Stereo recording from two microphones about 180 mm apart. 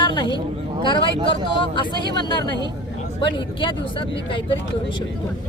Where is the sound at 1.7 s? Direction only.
25° left (ahead or behind).